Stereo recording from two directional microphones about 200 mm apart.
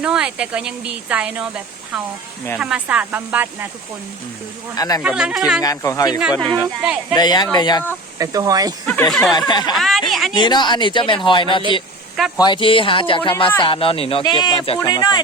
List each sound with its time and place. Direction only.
0.0 s speech: 5° right (ahead or behind)
4.8 s speech: 20° left (ahead or behind)
5.0 s speech: 5° right (ahead or behind)
5.6 s speech: 15° left (ahead or behind)
6.6 s speech: 5° right (ahead or behind)
7.1 s speech: 20° left (ahead or behind)
8.2 s speech: 15° right (ahead or behind)
8.9 s speech: 5° left (ahead or behind)
9.5 s speech: 20° left (ahead or behind)
9.7 s speech: centre (ahead or behind)
10.3 s speech: 20° left (ahead or behind)